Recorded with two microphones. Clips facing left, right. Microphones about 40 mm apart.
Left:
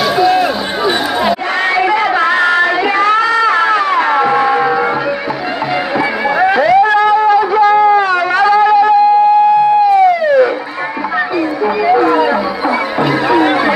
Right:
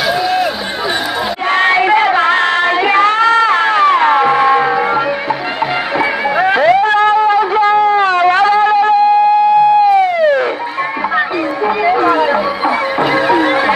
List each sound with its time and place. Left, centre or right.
0.2 s run: centre
1.6 s a sound: right
5.9 s music: right
9.8 s police car: right
13.3 s music: right